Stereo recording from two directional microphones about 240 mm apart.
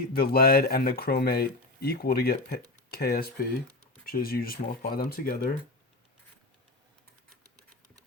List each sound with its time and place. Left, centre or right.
0.1 s speech: left